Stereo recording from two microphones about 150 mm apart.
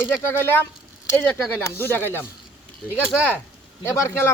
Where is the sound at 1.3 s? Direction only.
15° left (ahead or behind).